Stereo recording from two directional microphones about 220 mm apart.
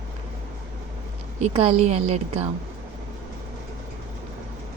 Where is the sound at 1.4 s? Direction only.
25° right (ahead or behind).